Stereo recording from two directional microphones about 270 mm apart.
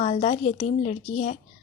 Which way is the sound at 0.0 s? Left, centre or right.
Left.